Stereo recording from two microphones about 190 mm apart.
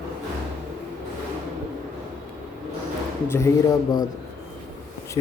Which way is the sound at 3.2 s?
15° left (ahead or behind).